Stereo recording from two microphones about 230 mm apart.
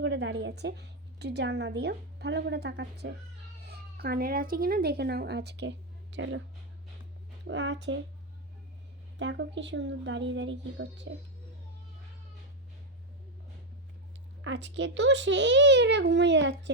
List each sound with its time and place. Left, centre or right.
0.0 s a woman's voice: right
7.4 s a woman's voice: right
9.1 s a woman's voice: right
14.4 s a woman's voice: right